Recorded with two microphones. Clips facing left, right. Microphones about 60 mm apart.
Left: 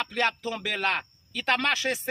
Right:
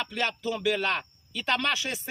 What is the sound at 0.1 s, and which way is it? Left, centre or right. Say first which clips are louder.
Speech: left 2 dB; left.